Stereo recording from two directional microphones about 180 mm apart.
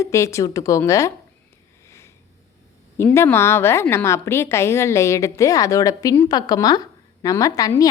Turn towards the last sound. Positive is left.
turn(degrees=20)  # may be behind; listen again after turning